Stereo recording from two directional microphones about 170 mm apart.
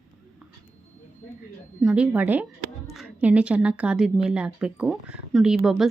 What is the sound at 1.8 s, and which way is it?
A woman's voice, 5° right (ahead or behind).